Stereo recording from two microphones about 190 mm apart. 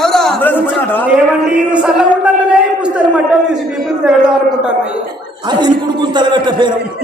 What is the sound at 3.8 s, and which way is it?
A woman's voice, centre (ahead or behind).